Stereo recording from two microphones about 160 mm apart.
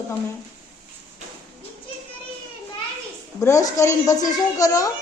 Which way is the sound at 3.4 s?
20° left (ahead or behind).